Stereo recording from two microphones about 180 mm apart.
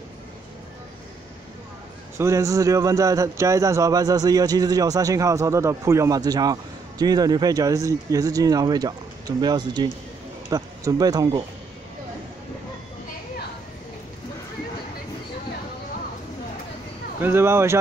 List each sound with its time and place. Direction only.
2.1 s a man's voice: 15° right (ahead or behind)
17.2 s speech: 15° right (ahead or behind)